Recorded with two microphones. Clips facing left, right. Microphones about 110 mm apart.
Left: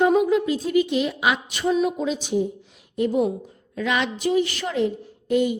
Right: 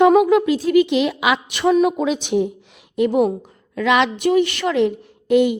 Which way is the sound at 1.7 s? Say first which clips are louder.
Right 6 dB; 65° right (ahead or behind).